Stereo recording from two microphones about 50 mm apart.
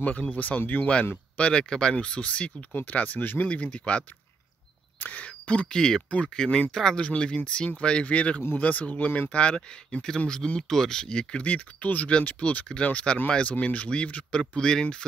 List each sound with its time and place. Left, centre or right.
0.0 s speech: left
1.3 s speech: centre
2.7 s speech: left
3.4 s speech: left
5.1 s speech: left
6.0 s speech: left
6.3 s speech: centre